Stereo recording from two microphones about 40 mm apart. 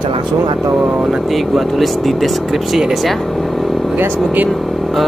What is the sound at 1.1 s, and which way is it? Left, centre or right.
Speech, centre.